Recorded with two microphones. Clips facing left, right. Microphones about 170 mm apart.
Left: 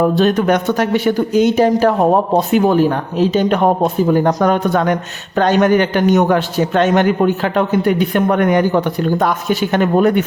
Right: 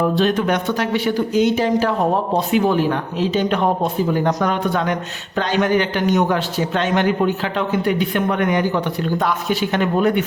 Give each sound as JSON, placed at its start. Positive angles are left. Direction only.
{"t": 0.2, "sound": "a man's voice", "side_deg": 45}